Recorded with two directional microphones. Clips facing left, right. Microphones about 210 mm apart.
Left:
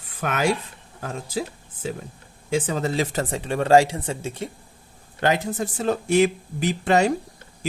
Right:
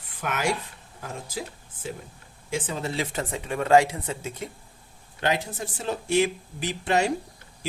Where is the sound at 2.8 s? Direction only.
40° left (ahead or behind).